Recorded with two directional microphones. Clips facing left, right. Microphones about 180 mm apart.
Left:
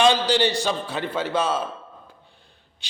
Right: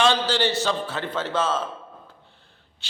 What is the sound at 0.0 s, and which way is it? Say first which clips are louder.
A man's voice: left 3 dB; 15° left (ahead or behind).